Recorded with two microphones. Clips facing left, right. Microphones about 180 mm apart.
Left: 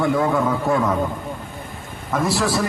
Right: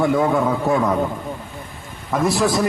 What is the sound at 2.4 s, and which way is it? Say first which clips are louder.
Speech: right 3 dB; 15° right (ahead or behind).